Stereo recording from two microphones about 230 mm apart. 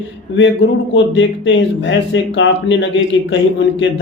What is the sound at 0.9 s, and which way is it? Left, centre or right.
A man's voice, left.